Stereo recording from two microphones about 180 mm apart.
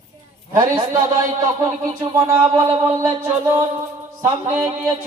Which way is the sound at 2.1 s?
15° right (ahead or behind).